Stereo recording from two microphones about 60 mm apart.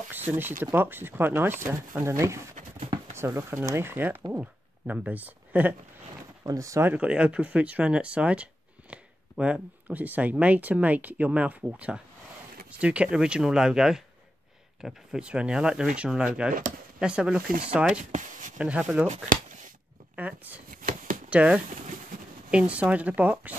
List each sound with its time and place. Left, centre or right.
0.1 s speech: right
3.3 s speech: right
4.3 s speech: centre
6.4 s speech: right
7.0 s speech: right
20.2 s speech: right